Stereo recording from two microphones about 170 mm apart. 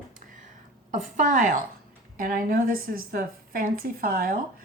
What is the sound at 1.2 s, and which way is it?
A woman's voice, 50° right (ahead or behind).